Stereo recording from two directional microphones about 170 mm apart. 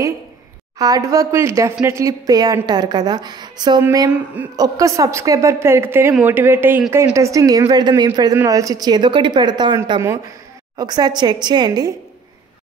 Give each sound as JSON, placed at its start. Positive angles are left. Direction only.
{"t": 0.7, "sound": "a woman's voice", "side_deg": -20}